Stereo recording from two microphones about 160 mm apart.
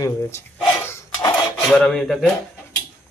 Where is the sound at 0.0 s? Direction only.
15° left (ahead or behind).